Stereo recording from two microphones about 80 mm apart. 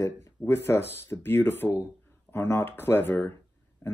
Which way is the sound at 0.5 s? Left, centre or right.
Left.